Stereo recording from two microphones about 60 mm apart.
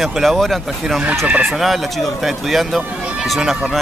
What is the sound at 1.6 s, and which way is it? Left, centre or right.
Speech, centre.